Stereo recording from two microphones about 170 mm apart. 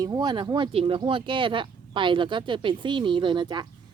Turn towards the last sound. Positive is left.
turn(degrees=-25)  # may be behind; listen again after turning